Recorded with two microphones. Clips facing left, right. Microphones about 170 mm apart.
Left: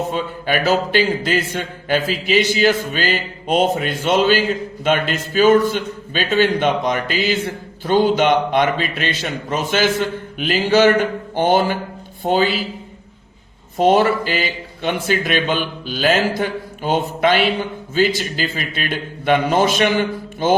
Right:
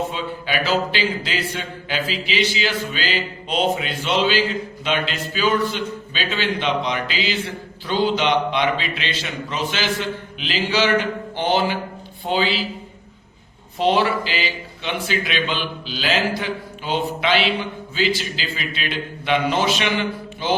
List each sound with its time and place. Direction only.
0.1 s speech: 50° left (ahead or behind)
13.7 s speech: 45° left (ahead or behind)